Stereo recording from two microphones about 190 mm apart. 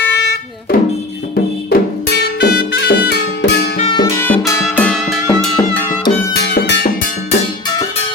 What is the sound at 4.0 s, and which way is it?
Music, 10° left (ahead or behind).